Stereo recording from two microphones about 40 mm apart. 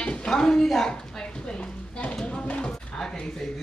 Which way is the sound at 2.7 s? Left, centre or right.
Centre.